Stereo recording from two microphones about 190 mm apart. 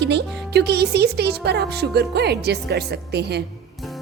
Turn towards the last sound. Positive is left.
turn(degrees=-60)  # may be behind; listen again after turning